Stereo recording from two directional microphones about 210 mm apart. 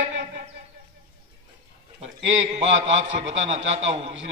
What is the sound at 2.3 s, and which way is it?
A man's voice, 60° right (ahead or behind).